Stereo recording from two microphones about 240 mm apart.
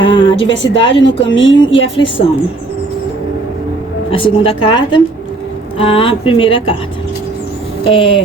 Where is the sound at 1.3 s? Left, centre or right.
Left.